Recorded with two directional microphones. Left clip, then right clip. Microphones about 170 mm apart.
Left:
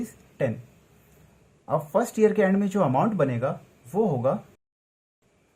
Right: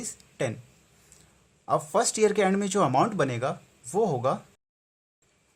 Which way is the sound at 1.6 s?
55° right (ahead or behind).